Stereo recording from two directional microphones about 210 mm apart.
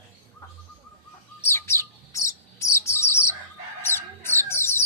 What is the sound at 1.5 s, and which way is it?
Bird, 10° left (ahead or behind).